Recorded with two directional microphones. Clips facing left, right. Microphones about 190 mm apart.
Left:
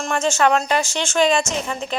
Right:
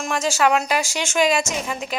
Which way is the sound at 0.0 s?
5° right (ahead or behind).